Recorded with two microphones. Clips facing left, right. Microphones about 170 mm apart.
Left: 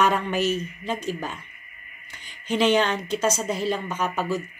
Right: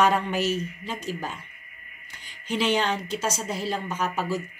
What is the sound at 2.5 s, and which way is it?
Speech, 55° left (ahead or behind).